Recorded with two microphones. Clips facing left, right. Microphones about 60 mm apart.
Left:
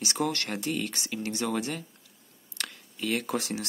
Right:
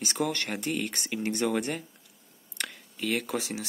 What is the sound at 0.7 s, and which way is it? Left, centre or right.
Speech, centre.